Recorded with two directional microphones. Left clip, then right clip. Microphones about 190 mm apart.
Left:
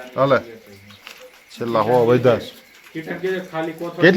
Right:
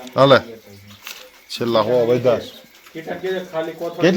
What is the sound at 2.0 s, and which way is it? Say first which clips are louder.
Speech: left 1 dB; 25° left (ahead or behind).